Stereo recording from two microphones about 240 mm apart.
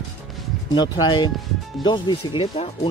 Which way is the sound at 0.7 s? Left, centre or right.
Centre.